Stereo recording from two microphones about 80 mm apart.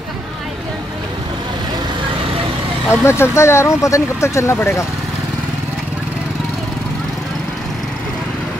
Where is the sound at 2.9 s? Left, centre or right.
Left.